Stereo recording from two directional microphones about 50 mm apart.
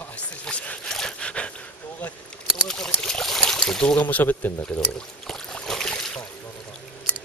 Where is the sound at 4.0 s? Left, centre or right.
Left.